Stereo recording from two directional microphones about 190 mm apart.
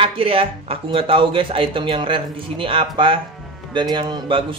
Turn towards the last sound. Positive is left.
turn(degrees=-25)  # may be behind; listen again after turning